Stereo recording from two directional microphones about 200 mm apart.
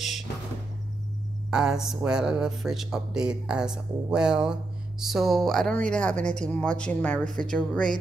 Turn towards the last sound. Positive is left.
turn(degrees=5)  # may be behind; listen again after turning